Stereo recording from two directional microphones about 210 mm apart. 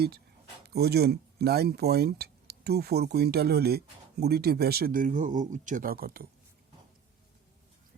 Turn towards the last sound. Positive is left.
turn(degrees=-45)  # may be behind; listen again after turning